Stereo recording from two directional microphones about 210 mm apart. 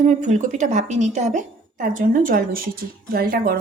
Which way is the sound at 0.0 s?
35° right (ahead or behind).